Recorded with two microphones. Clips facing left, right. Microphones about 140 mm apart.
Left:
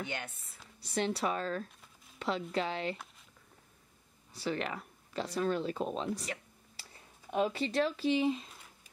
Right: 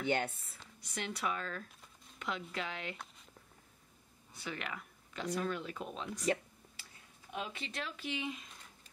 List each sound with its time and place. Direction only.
0.7 s speech: 30° left (ahead or behind)
4.3 s speech: 35° left (ahead or behind)
7.3 s speech: 35° left (ahead or behind)